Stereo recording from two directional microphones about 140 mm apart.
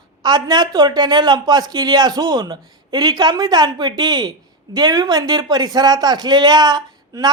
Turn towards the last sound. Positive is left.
turn(degrees=-30)  # may be behind; listen again after turning